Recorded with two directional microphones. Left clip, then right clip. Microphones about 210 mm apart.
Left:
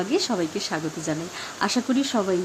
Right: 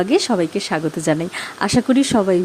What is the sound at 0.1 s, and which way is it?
Speech, 30° right (ahead or behind).